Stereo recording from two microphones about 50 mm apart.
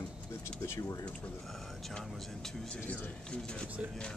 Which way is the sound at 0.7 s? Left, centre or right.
Left.